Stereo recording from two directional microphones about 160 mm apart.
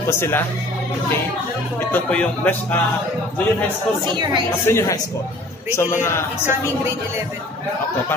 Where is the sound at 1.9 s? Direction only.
10° left (ahead or behind).